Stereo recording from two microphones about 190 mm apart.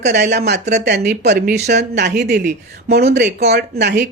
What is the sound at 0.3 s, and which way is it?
A woman's voice, 65° right (ahead or behind).